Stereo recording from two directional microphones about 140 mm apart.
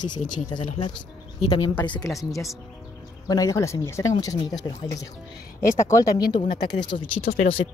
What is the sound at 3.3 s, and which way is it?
Speech, 25° left (ahead or behind).